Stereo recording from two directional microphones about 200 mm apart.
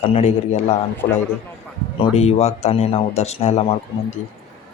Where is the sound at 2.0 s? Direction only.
30° left (ahead or behind).